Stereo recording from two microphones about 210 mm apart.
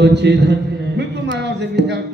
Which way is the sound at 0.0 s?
55° right (ahead or behind).